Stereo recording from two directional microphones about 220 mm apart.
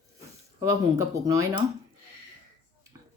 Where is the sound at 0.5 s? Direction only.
15° right (ahead or behind).